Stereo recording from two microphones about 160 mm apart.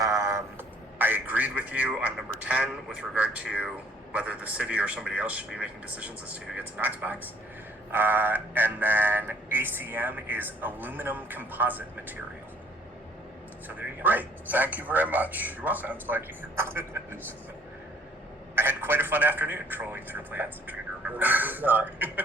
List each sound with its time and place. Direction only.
0.0 s a sound: 20° right (ahead or behind)
0.9 s speech: 10° right (ahead or behind)
13.7 s speech: 10° right (ahead or behind)
18.5 s speech: 15° right (ahead or behind)